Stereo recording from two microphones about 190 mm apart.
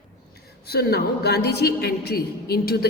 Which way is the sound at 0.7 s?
55° left (ahead or behind).